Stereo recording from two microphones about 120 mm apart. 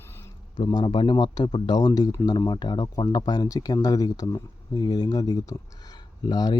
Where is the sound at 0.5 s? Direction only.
40° left (ahead or behind).